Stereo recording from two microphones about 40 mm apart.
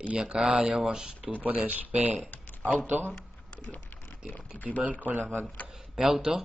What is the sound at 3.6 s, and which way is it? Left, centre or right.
Speech, left.